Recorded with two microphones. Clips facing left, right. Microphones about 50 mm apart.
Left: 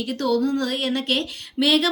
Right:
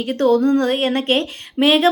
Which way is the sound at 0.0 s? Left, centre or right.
Right.